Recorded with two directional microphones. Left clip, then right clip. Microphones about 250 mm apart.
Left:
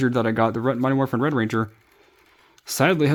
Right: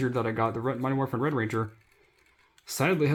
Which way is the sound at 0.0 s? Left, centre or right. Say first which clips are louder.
Left 7 dB; left.